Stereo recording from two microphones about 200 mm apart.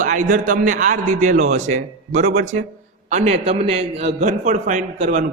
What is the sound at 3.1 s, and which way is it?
A man's voice, 30° right (ahead or behind).